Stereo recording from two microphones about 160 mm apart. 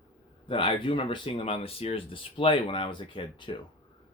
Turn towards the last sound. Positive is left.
turn(degrees=30)  # may be behind; listen again after turning